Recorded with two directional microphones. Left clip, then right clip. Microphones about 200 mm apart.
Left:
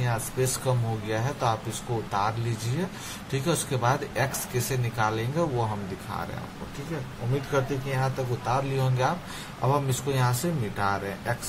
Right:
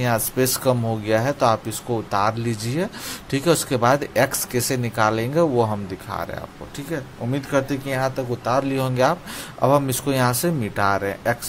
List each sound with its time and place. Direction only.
0.0 s speech: 50° right (ahead or behind)
7.5 s speech: 50° right (ahead or behind)